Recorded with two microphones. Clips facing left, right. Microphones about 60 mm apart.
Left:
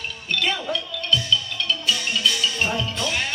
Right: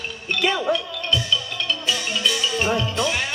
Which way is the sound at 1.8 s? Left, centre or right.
Centre.